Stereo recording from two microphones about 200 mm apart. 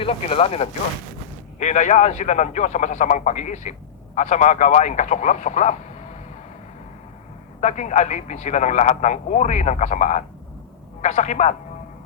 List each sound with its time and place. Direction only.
0.0 s a man's voice: 30° left (ahead or behind)
7.6 s a man's voice: 35° left (ahead or behind)